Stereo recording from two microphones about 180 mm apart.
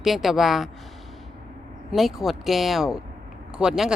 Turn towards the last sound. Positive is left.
turn(degrees=-5)  # may be behind; listen again after turning